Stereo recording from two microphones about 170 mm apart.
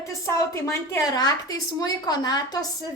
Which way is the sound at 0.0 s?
20° left (ahead or behind).